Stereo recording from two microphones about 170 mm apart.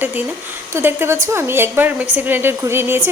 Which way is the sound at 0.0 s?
10° right (ahead or behind).